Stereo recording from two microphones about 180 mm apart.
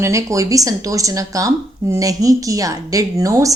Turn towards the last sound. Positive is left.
turn(degrees=-20)  # may be behind; listen again after turning